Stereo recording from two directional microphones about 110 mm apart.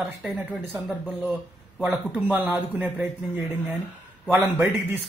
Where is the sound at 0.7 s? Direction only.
5° left (ahead or behind).